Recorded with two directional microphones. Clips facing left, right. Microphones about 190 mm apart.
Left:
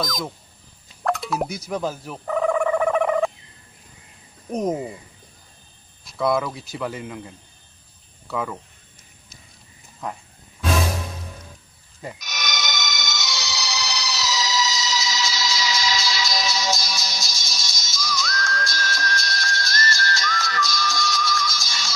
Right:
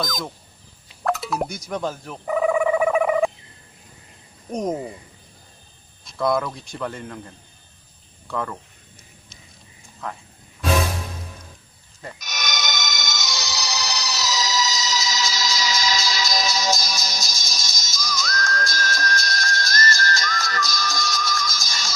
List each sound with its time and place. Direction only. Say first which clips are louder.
0.0 s a man's voice: left 1 dB; centre (ahead or behind)
2.2 s a sound: right 1 dB; 5° right (ahead or behind)
4.5 s a man's voice: left 1 dB; centre (ahead or behind)
6.0 s a man's voice: even; centre (ahead or behind)
12.2 s music: right 3 dB; 45° right (ahead or behind)